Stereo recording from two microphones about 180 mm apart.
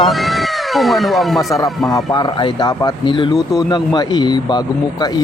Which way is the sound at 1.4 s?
20° left (ahead or behind).